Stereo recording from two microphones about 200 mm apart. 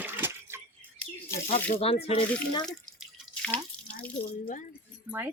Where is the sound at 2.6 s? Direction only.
5° left (ahead or behind).